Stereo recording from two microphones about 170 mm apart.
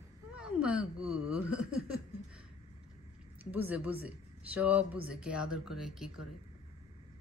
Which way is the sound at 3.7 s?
10° right (ahead or behind).